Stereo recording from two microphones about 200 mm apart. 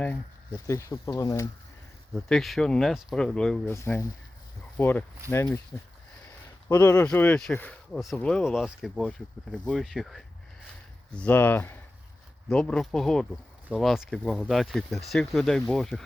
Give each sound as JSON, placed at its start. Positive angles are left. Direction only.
{"t": 0.0, "sound": "speech", "side_deg": 10}
{"t": 2.1, "sound": "speech", "side_deg": 0}
{"t": 6.7, "sound": "speech", "side_deg": 10}